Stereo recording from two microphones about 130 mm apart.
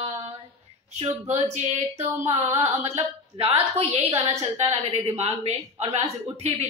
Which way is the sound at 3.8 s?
55° right (ahead or behind).